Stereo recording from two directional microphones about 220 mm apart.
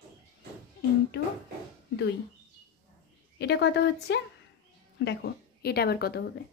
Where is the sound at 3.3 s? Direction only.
50° left (ahead or behind).